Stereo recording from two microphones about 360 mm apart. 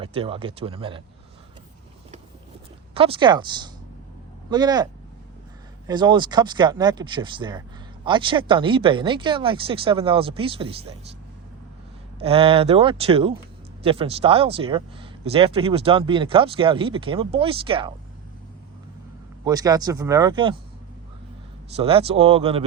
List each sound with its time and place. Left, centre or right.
0.0 s speech: centre
2.9 s speech: centre
5.9 s speech: centre
12.2 s speech: centre
19.5 s speech: centre
21.8 s speech: centre